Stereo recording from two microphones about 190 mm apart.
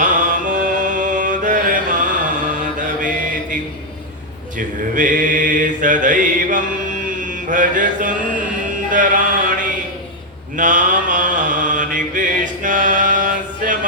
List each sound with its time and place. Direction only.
0.0 s mantra: 45° right (ahead or behind)
4.5 s mantra: 45° right (ahead or behind)
8.9 s a sound: 45° right (ahead or behind)
10.6 s mantra: 45° right (ahead or behind)